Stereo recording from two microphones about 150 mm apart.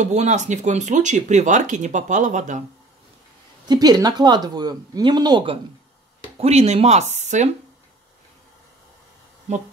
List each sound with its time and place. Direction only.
0.0 s speech: 50° right (ahead or behind)
3.6 s speech: 25° right (ahead or behind)
6.4 s speech: 45° right (ahead or behind)